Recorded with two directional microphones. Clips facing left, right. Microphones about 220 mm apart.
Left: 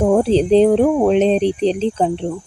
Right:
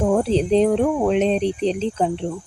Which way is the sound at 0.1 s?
30° left (ahead or behind).